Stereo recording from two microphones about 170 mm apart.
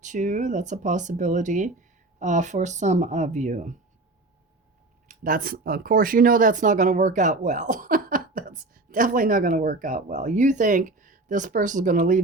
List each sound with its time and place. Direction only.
0.0 s speech: 45° right (ahead or behind)
5.0 s speech: 55° right (ahead or behind)